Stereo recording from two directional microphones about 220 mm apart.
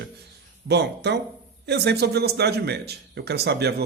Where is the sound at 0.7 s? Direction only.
50° right (ahead or behind).